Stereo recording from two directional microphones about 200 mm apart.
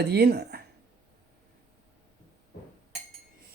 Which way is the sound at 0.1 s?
55° right (ahead or behind).